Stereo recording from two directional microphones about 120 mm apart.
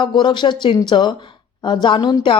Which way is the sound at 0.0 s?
40° left (ahead or behind).